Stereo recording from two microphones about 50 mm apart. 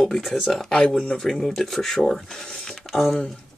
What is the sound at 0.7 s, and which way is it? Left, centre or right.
Speech, centre.